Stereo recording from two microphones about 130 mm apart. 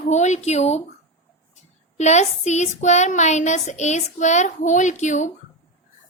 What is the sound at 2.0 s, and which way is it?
Speech, 60° left (ahead or behind).